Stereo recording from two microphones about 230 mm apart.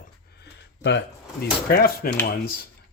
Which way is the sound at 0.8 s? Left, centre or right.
Left.